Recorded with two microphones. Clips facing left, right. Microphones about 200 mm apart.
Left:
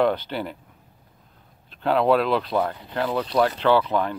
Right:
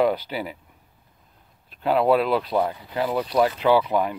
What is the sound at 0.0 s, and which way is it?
Speech, 5° right (ahead or behind).